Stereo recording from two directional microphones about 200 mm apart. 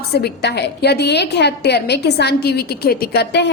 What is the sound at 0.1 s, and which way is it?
A woman's voice, 55° left (ahead or behind).